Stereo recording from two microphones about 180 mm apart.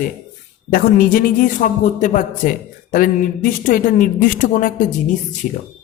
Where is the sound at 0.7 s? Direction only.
55° left (ahead or behind).